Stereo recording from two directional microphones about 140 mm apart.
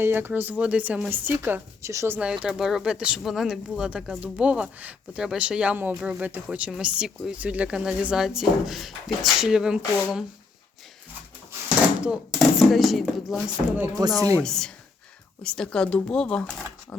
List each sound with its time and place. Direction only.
0.0 s speech: 15° right (ahead or behind)
12.0 s speech: 5° right (ahead or behind)
14.2 s speech: 25° right (ahead or behind)
14.4 s speech: 5° left (ahead or behind)